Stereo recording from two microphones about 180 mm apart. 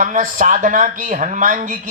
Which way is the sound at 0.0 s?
45° right (ahead or behind).